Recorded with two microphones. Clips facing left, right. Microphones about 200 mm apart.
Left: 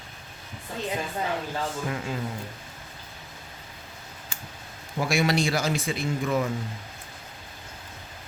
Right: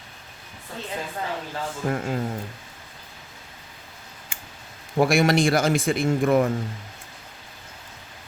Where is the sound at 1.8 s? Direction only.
50° right (ahead or behind).